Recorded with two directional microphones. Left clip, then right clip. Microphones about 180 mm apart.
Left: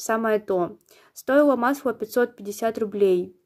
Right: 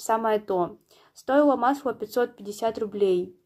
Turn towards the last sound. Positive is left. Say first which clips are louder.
# left 3 dB
turn(degrees=35)  # may be behind; listen again after turning